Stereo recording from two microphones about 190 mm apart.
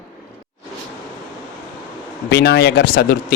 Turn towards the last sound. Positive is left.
turn(degrees=55)  # may be behind; listen again after turning